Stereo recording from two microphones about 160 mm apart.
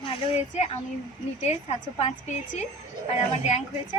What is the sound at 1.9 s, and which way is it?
Speech, 45° left (ahead or behind).